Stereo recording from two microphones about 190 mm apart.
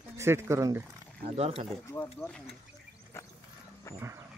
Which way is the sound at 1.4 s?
30° right (ahead or behind).